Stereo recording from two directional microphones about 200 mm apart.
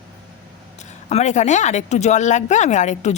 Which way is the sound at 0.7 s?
35° left (ahead or behind).